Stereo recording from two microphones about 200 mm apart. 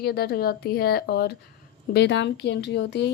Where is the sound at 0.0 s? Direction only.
50° left (ahead or behind).